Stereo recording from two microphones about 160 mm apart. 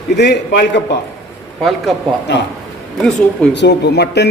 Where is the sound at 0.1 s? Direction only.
90° left.